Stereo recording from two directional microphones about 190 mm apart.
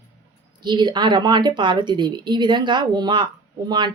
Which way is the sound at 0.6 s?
25° right (ahead or behind).